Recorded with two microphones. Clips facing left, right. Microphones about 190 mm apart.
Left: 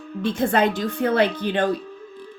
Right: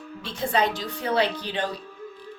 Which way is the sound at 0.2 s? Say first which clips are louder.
Left 5 dB; 55° left (ahead or behind).